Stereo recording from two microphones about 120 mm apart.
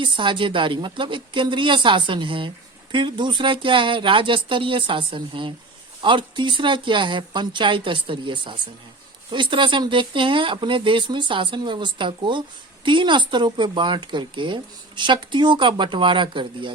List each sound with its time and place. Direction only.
0.0 s speech: 40° right (ahead or behind)